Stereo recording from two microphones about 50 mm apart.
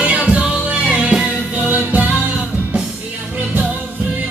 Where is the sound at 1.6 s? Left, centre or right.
Right.